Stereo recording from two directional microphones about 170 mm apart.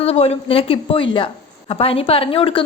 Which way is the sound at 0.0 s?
35° left (ahead or behind).